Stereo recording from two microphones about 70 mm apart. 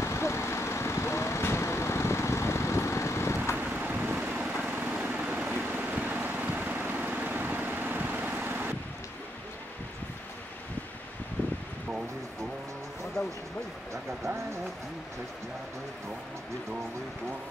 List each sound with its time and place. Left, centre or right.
0.0 s vehicle: left
3.5 s vehicle: right